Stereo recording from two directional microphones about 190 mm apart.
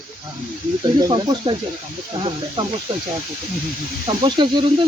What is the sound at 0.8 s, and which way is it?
Speech, 20° right (ahead or behind).